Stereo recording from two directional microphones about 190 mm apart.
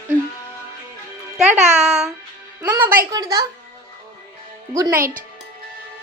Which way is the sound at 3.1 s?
20° right (ahead or behind).